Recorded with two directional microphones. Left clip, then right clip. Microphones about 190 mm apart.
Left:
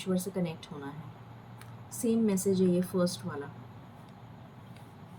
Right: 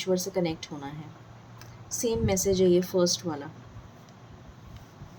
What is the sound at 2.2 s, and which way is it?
Speech, 45° right (ahead or behind).